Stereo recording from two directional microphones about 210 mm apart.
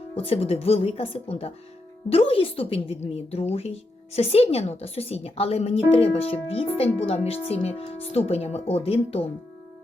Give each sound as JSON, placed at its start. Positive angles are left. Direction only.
{"t": 0.1, "sound": "a woman's voice", "side_deg": 25}